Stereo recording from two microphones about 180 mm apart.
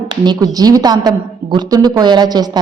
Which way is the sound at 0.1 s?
20° right (ahead or behind).